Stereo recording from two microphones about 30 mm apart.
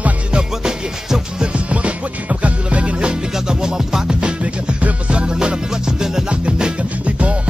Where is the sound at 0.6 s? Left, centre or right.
Right.